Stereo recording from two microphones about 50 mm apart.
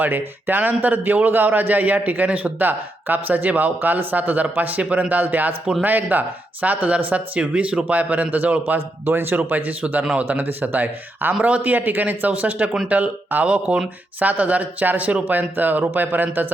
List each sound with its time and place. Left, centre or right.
0.0 s a man's voice: right
8.6 s a man's voice: right
11.4 s a man's voice: right